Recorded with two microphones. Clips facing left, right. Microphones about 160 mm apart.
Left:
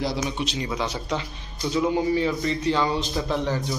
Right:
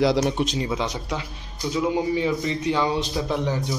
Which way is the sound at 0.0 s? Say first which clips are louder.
Right 7 dB; 75° right (ahead or behind).